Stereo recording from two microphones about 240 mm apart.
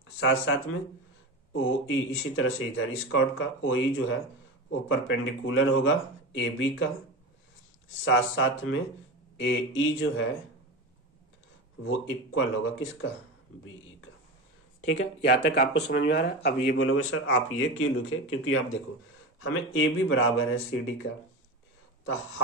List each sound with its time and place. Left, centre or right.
0.2 s speech: left
8.0 s speech: left
11.8 s speech: left
14.8 s speech: left
16.6 s speech: left